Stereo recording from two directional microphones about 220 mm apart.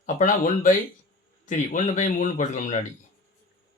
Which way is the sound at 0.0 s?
35° left (ahead or behind).